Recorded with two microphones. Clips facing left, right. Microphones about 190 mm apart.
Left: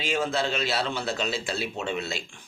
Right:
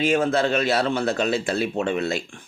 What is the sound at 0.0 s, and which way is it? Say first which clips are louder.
A man's voice: right 7 dB; 55° right (ahead or behind).